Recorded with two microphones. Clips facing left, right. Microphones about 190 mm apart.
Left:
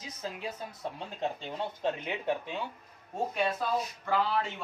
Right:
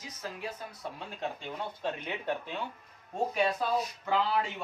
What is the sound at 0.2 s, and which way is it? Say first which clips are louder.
A man's voice: left 1 dB; 20° left (ahead or behind).